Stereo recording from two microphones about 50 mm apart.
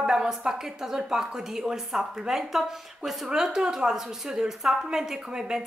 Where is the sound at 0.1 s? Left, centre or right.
Centre.